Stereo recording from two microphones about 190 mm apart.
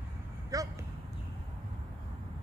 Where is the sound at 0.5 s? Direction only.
20° right (ahead or behind).